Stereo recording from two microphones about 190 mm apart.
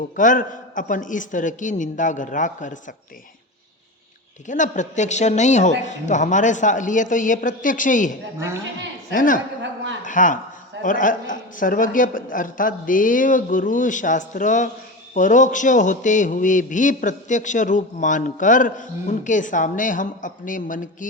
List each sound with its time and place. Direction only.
0.2 s a man's voice: 45° left (ahead or behind)
4.4 s a woman's voice: 40° left (ahead or behind)
8.4 s a woman's voice: 15° right (ahead or behind)
9.1 s a man's voice: 45° left (ahead or behind)